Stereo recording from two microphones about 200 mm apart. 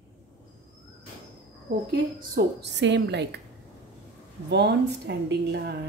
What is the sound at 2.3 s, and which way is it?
A woman's voice, 60° right (ahead or behind).